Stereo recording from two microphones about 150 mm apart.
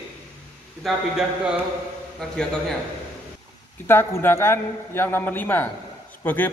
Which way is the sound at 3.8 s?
15° left (ahead or behind).